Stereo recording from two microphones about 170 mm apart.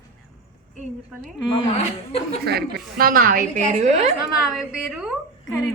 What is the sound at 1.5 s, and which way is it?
Speech, 30° left (ahead or behind).